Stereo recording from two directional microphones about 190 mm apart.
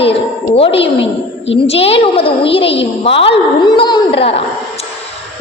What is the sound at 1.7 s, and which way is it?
A woman's voice, 30° left (ahead or behind).